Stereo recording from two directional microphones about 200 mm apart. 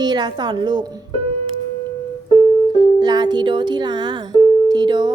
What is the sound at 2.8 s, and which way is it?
Speech, 20° right (ahead or behind).